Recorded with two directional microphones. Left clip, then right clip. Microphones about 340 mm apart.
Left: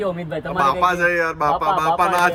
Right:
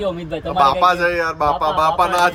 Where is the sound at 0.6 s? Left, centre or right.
Centre.